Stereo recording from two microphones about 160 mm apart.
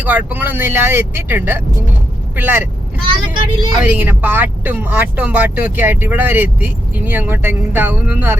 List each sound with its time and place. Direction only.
0.0 s speech: 10° right (ahead or behind)
3.3 s speech: 30° right (ahead or behind)
3.8 s speech: 10° right (ahead or behind)